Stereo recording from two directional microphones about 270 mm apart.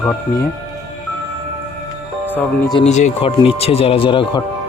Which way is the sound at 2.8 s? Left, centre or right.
Left.